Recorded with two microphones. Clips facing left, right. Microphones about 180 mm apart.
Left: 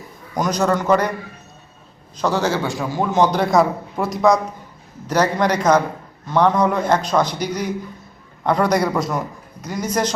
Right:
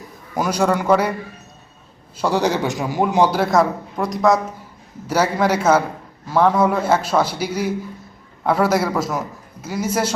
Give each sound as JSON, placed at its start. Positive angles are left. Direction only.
{"t": 0.0, "sound": "a man's voice", "side_deg": -5}
{"t": 2.1, "sound": "a man's voice", "side_deg": -10}